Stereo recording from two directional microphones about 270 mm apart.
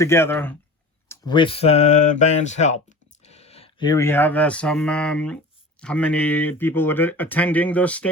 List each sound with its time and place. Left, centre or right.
0.0 s speech: centre